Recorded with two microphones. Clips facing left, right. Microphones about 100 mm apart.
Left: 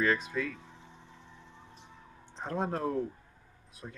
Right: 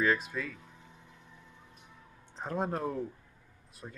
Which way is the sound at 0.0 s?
5° right (ahead or behind).